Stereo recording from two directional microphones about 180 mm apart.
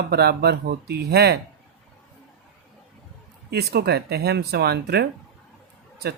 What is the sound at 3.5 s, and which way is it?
Speech, 65° right (ahead or behind).